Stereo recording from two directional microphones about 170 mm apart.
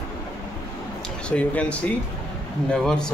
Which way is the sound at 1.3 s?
10° left (ahead or behind).